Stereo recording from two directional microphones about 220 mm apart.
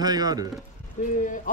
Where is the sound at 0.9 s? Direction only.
35° left (ahead or behind).